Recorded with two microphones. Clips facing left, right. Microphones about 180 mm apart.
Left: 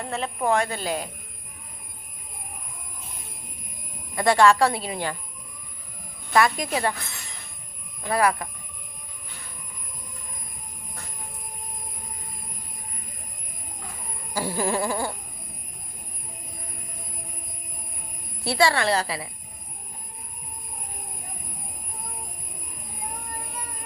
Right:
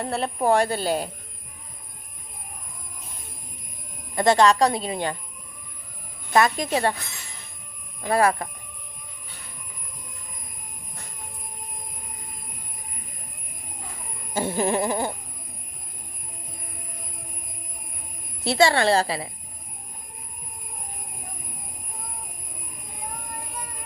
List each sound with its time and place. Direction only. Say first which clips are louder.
0.0 s speech: right 3 dB; 35° right (ahead or behind)
4.1 s speech: even; 25° right (ahead or behind)
6.3 s speech: right 1 dB; 25° right (ahead or behind)
8.0 s speech: right 2 dB; 25° right (ahead or behind)
14.3 s speech: right 2 dB; 20° right (ahead or behind)
18.4 s speech: right 3 dB; 25° right (ahead or behind)